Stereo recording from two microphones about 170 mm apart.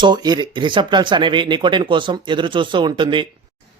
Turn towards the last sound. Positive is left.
turn(degrees=-30)  # may be behind; listen again after turning